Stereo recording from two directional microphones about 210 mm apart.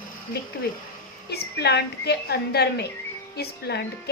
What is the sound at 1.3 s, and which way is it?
A woman's voice, 50° left (ahead or behind).